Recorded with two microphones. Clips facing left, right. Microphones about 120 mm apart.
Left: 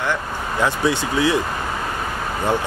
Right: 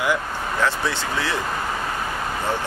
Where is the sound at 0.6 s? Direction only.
15° left (ahead or behind).